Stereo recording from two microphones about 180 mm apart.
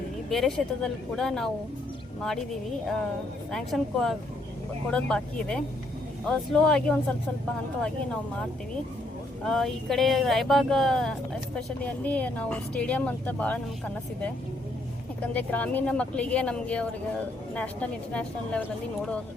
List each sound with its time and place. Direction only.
0.3 s speech: centre (ahead or behind)
3.5 s speech: centre (ahead or behind)
6.2 s speech: 5° left (ahead or behind)
9.4 s speech: 5° left (ahead or behind)
15.3 s speech: 10° left (ahead or behind)